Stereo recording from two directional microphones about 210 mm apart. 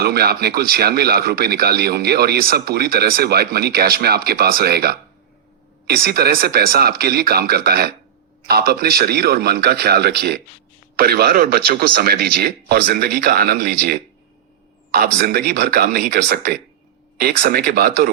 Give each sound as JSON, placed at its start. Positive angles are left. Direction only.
{"t": 0.0, "sound": "speech", "side_deg": -50}
{"t": 15.2, "sound": "speech", "side_deg": -45}